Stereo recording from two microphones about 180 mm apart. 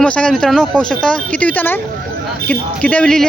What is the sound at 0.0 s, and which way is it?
Speech, 5° left (ahead or behind).